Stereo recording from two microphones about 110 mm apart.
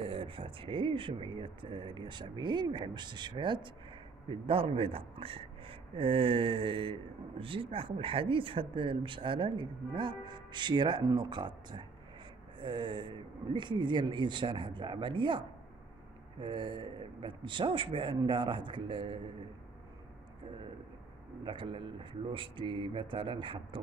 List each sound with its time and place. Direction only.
0.0 s speech: 50° right (ahead or behind)
21.5 s speech: 50° right (ahead or behind)